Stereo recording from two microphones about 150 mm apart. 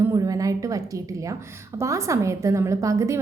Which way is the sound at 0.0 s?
25° right (ahead or behind).